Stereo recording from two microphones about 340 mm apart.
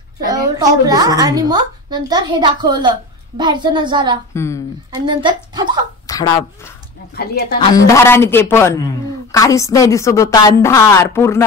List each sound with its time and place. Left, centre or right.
0.3 s a child's voice: centre
4.3 s a woman's voice: centre
5.0 s a child's voice: centre
6.0 s a sound: centre
7.2 s a woman's voice: left
7.5 s a woman's voice: centre